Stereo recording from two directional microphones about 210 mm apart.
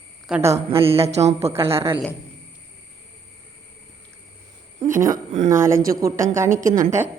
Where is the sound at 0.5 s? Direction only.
30° right (ahead or behind).